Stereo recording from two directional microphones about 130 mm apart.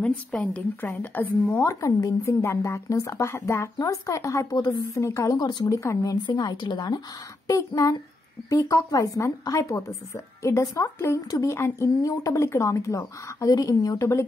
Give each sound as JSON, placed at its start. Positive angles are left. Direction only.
{"t": 0.3, "sound": "a woman's voice", "side_deg": 10}